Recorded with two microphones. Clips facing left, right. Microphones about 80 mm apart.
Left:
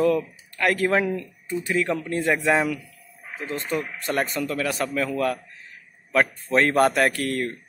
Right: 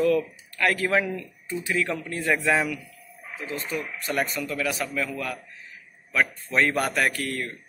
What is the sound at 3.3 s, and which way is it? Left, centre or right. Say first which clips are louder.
A man's voice: left 4 dB; left.